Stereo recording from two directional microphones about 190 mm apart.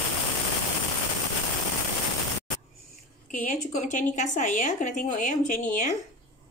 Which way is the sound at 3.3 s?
40° left (ahead or behind).